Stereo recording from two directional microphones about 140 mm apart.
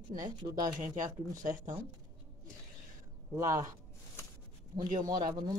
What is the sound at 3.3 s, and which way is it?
Speech, 20° right (ahead or behind).